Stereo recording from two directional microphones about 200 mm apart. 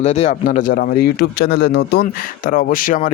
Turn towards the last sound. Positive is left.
turn(degrees=45)  # may be behind; listen again after turning